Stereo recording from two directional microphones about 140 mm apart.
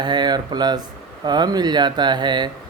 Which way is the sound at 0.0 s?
30° right (ahead or behind).